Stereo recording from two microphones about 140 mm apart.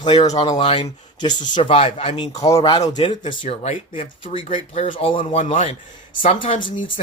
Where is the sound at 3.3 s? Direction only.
45° left (ahead or behind).